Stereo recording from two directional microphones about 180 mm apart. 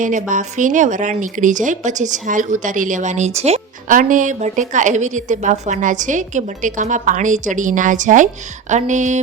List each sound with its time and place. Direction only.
0.0 s speech: 45° right (ahead or behind)